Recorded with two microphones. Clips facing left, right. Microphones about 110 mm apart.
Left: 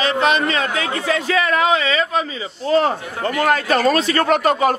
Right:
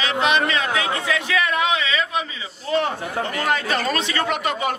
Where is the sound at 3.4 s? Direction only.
50° left (ahead or behind).